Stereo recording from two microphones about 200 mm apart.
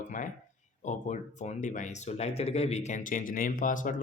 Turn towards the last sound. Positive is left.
turn(degrees=40)  # may be behind; listen again after turning